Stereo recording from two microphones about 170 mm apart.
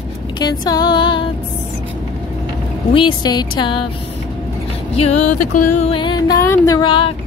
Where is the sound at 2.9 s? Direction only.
25° left (ahead or behind).